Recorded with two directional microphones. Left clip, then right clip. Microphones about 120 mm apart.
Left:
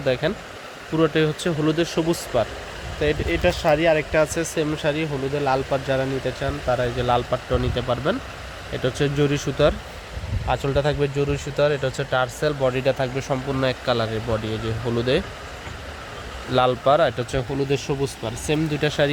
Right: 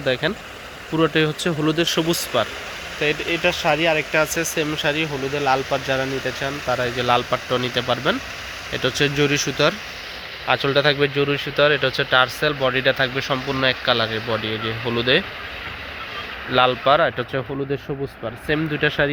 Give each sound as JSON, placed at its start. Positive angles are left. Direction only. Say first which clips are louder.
{"t": 0.0, "sound": "speech", "louder": "right 1 dB", "side_deg": 0}
{"t": 3.0, "sound": "speech", "louder": "right 1 dB", "side_deg": 20}
{"t": 10.4, "sound": "speech", "louder": "right 4 dB", "side_deg": -5}
{"t": 12.6, "sound": "speech", "louder": "right 3 dB", "side_deg": 15}
{"t": 13.2, "sound": "a man's voice", "louder": "right 2 dB", "side_deg": -15}
{"t": 13.6, "sound": "speech", "louder": "right 4 dB", "side_deg": 15}
{"t": 16.6, "sound": "speech", "louder": "right 2 dB", "side_deg": 20}